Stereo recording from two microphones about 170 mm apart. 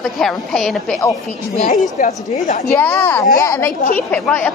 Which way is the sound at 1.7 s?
50° left (ahead or behind).